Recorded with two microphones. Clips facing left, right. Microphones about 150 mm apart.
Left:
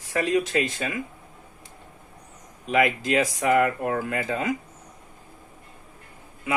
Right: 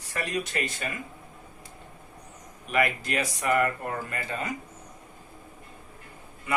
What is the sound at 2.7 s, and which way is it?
Speech, 90° left.